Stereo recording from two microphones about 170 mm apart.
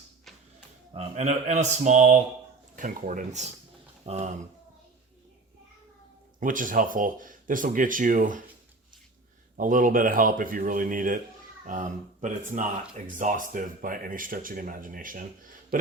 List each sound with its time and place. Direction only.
0.9 s speech: 40° right (ahead or behind)
6.4 s speech: 50° right (ahead or behind)
9.6 s speech: 50° right (ahead or behind)
15.7 s a sound: 55° right (ahead or behind)